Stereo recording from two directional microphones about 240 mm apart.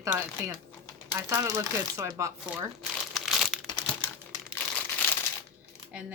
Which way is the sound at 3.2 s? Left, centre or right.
Centre.